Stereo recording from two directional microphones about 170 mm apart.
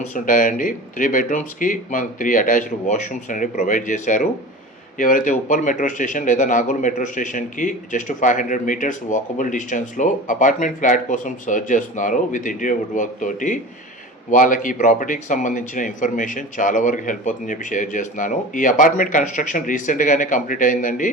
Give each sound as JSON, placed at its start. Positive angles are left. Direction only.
{"t": 0.0, "sound": "a man's voice", "side_deg": 50}